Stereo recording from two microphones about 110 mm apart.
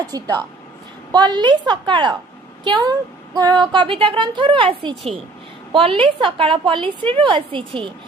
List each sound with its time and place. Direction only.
0.0 s a woman's voice: 35° right (ahead or behind)